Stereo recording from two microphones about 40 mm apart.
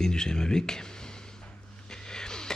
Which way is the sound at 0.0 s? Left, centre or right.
Centre.